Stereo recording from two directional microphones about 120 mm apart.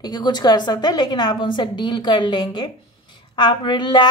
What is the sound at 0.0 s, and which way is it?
A woman's voice, 35° left (ahead or behind).